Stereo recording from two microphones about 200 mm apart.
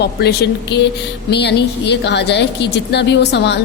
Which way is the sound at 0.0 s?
55° left (ahead or behind).